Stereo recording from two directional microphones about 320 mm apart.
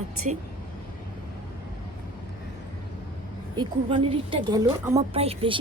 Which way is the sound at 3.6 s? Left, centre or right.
Centre.